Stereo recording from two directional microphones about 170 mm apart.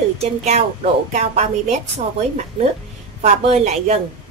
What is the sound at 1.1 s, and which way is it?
Speech, 45° right (ahead or behind).